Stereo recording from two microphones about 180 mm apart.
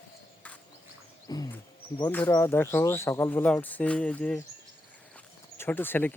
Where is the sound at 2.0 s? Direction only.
10° left (ahead or behind).